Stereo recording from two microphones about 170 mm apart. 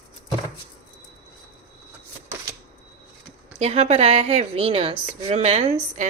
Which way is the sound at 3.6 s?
40° right (ahead or behind).